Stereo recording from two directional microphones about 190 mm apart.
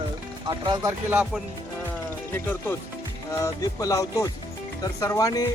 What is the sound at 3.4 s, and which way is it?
Music, 20° left (ahead or behind).